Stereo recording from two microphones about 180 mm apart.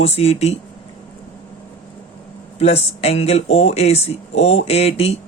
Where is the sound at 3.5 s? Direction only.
90° left.